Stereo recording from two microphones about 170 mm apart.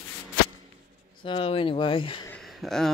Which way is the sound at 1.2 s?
30° left (ahead or behind).